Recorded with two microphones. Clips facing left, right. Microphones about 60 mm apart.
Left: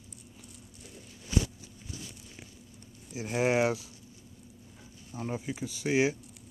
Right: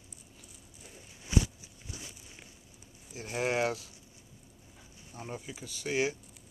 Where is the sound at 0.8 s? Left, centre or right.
Centre.